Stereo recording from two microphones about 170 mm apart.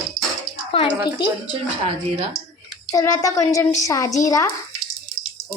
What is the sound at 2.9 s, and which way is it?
A woman's voice, 20° left (ahead or behind).